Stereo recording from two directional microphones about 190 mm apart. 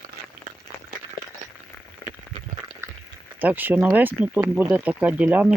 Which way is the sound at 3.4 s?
10° right (ahead or behind).